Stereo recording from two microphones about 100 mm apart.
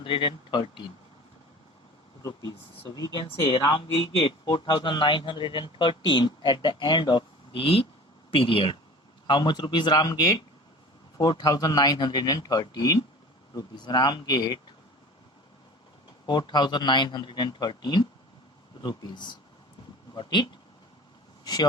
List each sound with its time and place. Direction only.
0.0 s speech: 55° left (ahead or behind)
2.5 s speech: 40° left (ahead or behind)
3.2 s speech: 75° left (ahead or behind)
3.7 s speech: 60° left (ahead or behind)
7.6 s speech: 75° left (ahead or behind)
8.3 s speech: 65° left (ahead or behind)
9.2 s a man's voice: 50° left (ahead or behind)
16.2 s speech: 45° left (ahead or behind)
21.4 s speech: 40° left (ahead or behind)